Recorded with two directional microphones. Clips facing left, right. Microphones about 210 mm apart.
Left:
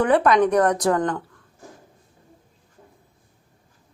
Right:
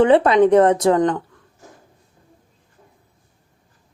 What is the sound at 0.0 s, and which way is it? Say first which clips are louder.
Speech: right 5 dB; 25° right (ahead or behind).